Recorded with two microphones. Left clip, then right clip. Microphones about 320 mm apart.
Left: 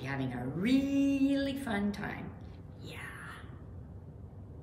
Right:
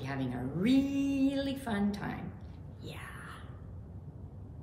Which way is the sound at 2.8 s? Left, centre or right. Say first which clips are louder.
Left 1 dB; centre.